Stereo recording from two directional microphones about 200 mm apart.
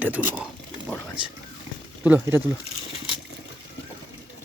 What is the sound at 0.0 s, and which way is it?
Speech, 10° right (ahead or behind).